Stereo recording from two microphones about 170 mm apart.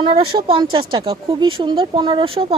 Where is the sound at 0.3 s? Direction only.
30° right (ahead or behind).